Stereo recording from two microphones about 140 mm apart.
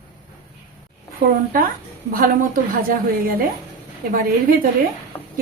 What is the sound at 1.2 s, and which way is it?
Speech, 90° right.